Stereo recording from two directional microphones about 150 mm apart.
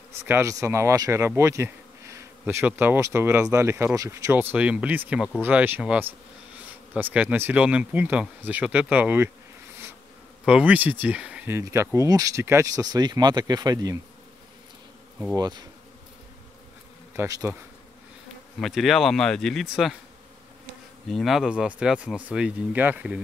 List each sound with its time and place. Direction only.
0.3 s speech: 20° right (ahead or behind)
10.4 s speech: 10° right (ahead or behind); by 13.9 s 25° right (ahead or behind)
15.3 s speech: 25° right (ahead or behind)
17.1 s bee: 20° right (ahead or behind)
18.6 s speech: centre (ahead or behind)
21.1 s speech: centre (ahead or behind)